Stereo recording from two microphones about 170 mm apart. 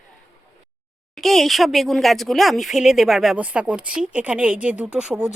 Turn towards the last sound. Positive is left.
turn(degrees=-5)  # may be behind; listen again after turning